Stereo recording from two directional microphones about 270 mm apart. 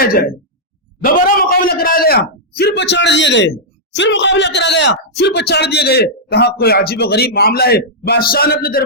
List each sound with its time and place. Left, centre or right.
0.0 s a man's voice: left